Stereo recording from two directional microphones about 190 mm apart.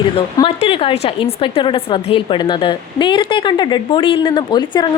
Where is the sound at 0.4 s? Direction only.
30° left (ahead or behind).